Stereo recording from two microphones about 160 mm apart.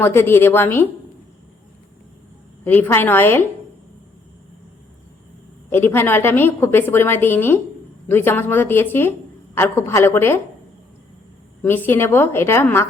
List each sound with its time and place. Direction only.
0.0 s a woman's voice: 15° left (ahead or behind)
2.6 s a woman's voice: 10° left (ahead or behind)
5.7 s a woman's voice: 15° left (ahead or behind)
11.6 s a woman's voice: 10° left (ahead or behind)